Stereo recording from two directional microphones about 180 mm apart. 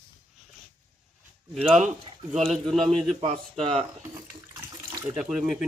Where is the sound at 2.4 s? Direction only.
Centre (ahead or behind).